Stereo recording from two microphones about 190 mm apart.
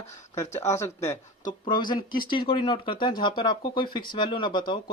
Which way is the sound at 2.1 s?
50° left (ahead or behind).